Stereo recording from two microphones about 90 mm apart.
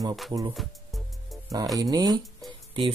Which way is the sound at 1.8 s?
45° right (ahead or behind).